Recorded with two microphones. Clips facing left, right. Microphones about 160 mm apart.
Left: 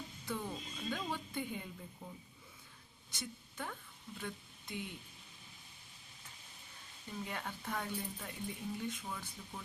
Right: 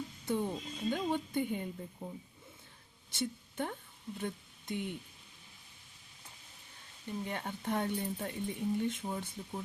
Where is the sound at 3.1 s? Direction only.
25° right (ahead or behind).